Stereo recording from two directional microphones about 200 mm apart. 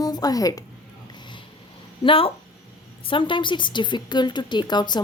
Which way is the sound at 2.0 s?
25° left (ahead or behind).